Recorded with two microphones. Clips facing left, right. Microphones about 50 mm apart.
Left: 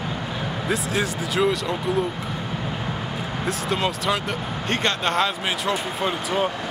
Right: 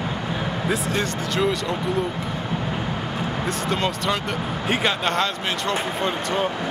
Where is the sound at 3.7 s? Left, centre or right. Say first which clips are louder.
Left 1 dB; centre.